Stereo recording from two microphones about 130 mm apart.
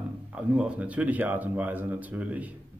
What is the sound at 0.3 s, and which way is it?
A man's voice, 10° right (ahead or behind).